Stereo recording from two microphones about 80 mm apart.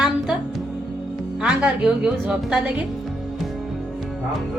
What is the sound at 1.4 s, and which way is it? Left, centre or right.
A woman's voice, centre.